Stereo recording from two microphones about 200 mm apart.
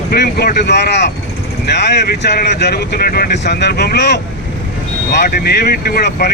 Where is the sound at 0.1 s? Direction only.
50° left (ahead or behind).